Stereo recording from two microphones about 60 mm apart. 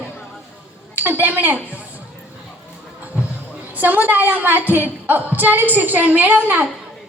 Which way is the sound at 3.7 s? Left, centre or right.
Right.